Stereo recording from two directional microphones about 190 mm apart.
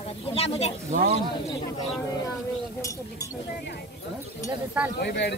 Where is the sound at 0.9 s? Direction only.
45° right (ahead or behind).